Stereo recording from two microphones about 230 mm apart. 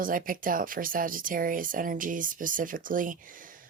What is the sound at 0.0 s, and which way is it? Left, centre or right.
Speech, right.